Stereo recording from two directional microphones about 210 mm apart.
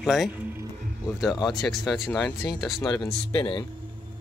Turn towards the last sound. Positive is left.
turn(degrees=25)  # may be behind; listen again after turning